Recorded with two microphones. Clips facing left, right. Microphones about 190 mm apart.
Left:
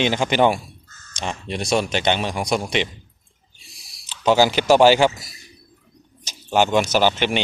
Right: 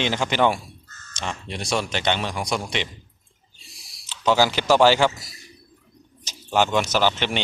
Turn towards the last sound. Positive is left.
turn(degrees=15)  # may be behind; listen again after turning